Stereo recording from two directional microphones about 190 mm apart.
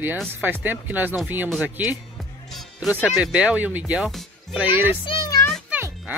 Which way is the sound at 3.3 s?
5° right (ahead or behind).